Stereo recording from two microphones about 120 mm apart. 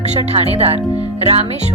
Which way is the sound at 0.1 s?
60° right (ahead or behind).